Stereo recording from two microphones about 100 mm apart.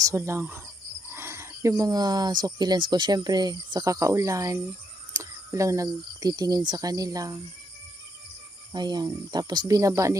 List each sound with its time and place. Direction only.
0.0 s cricket: 30° right (ahead or behind)
1.1 s speech: 25° right (ahead or behind)
8.7 s speech: 45° right (ahead or behind)